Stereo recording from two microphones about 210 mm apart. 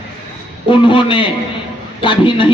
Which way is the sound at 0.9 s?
25° left (ahead or behind).